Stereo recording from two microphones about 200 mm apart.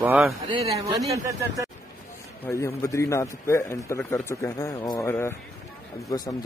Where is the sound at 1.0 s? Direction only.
15° right (ahead or behind).